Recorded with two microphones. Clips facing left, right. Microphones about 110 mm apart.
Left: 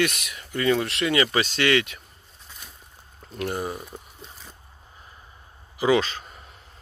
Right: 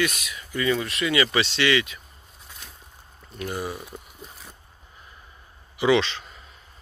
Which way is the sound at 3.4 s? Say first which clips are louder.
Left 1 dB; 40° left (ahead or behind).